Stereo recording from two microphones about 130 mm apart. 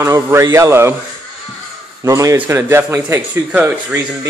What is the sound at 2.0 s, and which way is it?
Speech, 25° right (ahead or behind).